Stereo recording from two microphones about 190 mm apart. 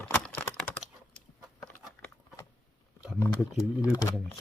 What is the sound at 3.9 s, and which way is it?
Speech, 20° left (ahead or behind).